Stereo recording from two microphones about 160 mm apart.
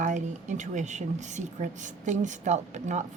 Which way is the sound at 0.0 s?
50° right (ahead or behind).